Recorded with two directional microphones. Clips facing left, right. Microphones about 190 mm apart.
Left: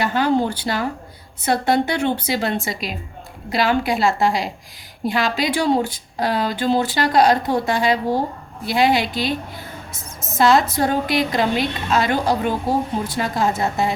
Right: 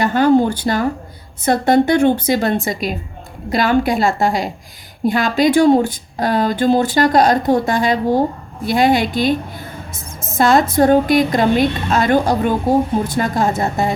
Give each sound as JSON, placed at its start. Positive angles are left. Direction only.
{"t": 0.0, "sound": "speech", "side_deg": -50}